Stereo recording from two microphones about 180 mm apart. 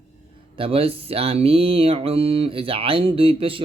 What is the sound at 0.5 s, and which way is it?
Mantra, 30° right (ahead or behind).